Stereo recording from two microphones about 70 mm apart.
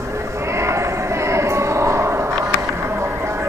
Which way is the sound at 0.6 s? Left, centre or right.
Right.